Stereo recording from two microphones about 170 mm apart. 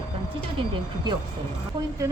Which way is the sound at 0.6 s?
25° right (ahead or behind).